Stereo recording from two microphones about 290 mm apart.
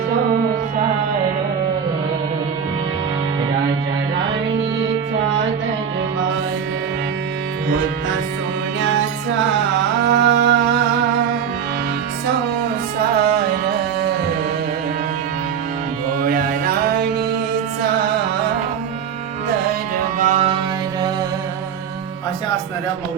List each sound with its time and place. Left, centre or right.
10.1 s music: right
13.0 s music: right
16.2 s mantra: right
20.1 s music: right